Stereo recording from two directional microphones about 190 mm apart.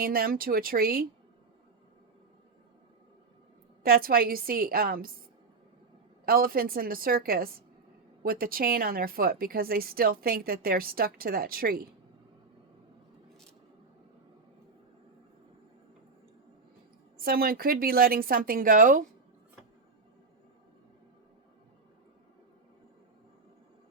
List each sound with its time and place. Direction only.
0.0 s speech: 50° right (ahead or behind)
3.8 s speech: 50° right (ahead or behind)
6.2 s speech: 50° right (ahead or behind)
17.2 s speech: 50° right (ahead or behind)